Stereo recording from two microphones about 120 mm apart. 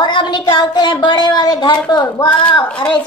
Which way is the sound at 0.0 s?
40° left (ahead or behind).